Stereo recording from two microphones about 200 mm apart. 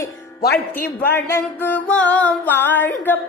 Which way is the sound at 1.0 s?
10° left (ahead or behind).